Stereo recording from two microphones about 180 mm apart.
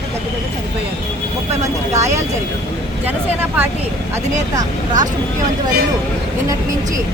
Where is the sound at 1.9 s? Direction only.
40° right (ahead or behind).